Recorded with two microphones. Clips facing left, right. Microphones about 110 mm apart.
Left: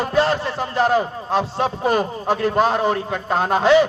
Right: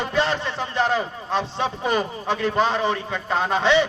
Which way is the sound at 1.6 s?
45° left (ahead or behind).